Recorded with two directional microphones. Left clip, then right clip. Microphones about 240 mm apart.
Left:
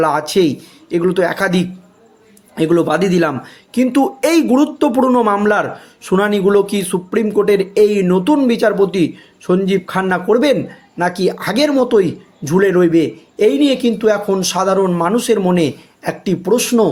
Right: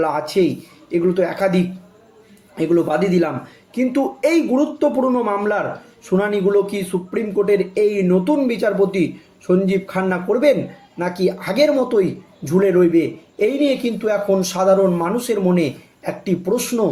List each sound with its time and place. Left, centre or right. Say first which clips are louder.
0.0 s speech: left 4 dB; left